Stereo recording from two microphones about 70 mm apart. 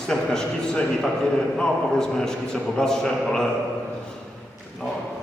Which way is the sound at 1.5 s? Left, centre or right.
Centre.